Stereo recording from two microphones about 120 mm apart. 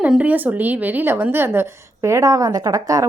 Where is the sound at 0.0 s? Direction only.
10° right (ahead or behind).